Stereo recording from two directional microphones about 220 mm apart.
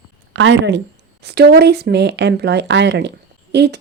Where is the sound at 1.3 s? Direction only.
50° right (ahead or behind).